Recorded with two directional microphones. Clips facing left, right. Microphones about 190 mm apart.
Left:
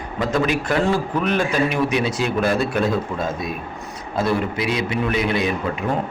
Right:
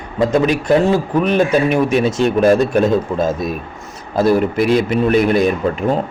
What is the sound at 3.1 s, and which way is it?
Speech, 30° right (ahead or behind).